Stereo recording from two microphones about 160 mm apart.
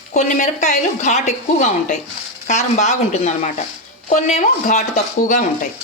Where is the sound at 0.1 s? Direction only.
50° left (ahead or behind).